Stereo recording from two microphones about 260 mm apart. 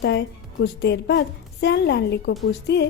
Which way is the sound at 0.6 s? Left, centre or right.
Left.